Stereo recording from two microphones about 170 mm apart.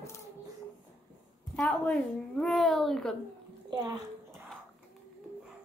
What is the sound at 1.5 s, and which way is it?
A child's voice, 10° left (ahead or behind).